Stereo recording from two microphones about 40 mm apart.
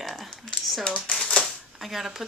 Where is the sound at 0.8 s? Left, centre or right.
Left.